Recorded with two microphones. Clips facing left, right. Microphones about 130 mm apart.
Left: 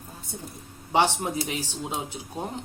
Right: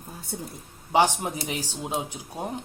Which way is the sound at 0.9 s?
15° right (ahead or behind).